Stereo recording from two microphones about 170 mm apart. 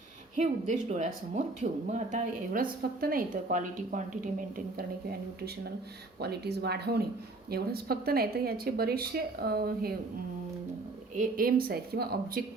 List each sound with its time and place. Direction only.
0.3 s speech: 45° right (ahead or behind)
6.1 s speech: 70° right (ahead or behind)
11.1 s speech: 50° right (ahead or behind)